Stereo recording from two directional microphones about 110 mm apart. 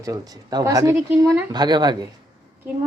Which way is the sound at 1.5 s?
40° right (ahead or behind).